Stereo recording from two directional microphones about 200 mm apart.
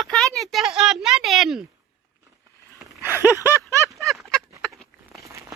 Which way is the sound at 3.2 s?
15° left (ahead or behind).